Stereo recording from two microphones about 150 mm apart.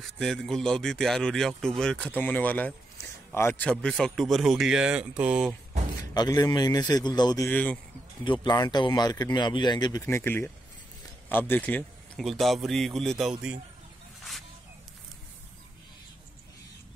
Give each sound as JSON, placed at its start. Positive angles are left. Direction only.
{"t": 0.0, "sound": "speech", "side_deg": 5}
{"t": 3.7, "sound": "speech", "side_deg": 5}
{"t": 6.1, "sound": "speech", "side_deg": 25}
{"t": 7.4, "sound": "speech", "side_deg": 10}
{"t": 8.2, "sound": "speech", "side_deg": 30}
{"t": 10.1, "sound": "speech", "side_deg": 15}
{"t": 12.2, "sound": "speech", "side_deg": 0}